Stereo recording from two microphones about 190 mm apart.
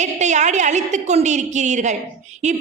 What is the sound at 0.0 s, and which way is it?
A woman's voice, 40° right (ahead or behind).